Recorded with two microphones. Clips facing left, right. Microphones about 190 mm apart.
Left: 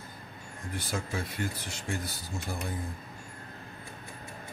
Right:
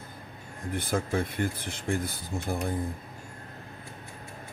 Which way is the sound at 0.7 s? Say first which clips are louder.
Right 6 dB; 55° right (ahead or behind).